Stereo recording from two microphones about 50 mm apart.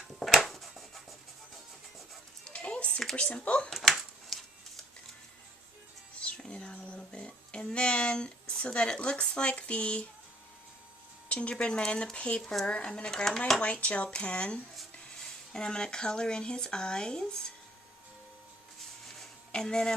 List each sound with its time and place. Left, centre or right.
0.2 s a sound: centre
2.5 s music: left
3.2 s speech: left
3.7 s a sound: centre
6.1 s a sound: left
11.3 s speech: left
13.1 s speech: centre
13.6 s speech: left
19.5 s speech: centre